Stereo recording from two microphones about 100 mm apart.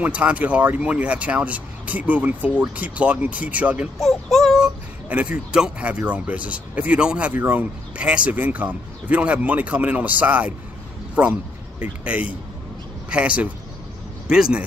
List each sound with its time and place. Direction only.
0.0 s speech: 15° right (ahead or behind)
4.0 s speech: centre (ahead or behind)